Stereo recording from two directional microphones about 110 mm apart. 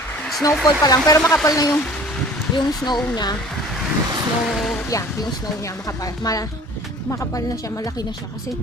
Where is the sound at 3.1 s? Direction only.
40° left (ahead or behind).